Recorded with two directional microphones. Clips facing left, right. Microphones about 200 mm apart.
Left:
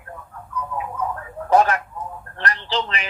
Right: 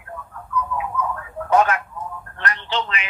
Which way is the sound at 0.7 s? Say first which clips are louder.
Right 1 dB; 35° left (ahead or behind).